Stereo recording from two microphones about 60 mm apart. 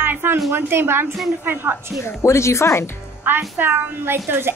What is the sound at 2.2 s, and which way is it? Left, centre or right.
Speech, left.